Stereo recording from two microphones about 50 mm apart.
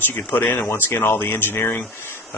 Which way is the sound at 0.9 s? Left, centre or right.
Left.